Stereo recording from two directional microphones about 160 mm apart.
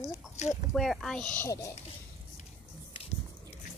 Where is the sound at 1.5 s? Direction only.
20° left (ahead or behind).